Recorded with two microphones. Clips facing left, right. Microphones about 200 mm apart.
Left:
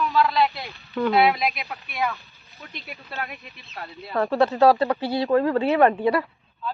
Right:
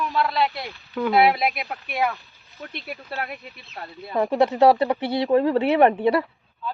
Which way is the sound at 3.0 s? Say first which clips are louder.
Right 1 dB; 35° right (ahead or behind).